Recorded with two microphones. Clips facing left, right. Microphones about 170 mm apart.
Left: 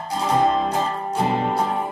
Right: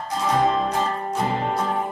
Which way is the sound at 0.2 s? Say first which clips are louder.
Left 1 dB; 30° left (ahead or behind).